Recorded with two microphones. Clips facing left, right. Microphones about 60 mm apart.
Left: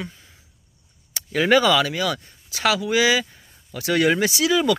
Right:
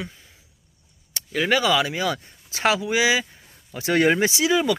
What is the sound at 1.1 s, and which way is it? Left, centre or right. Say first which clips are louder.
Speech: left 4 dB; centre.